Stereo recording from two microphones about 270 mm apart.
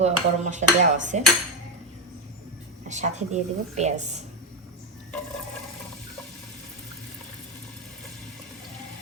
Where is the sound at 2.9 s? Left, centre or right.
Right.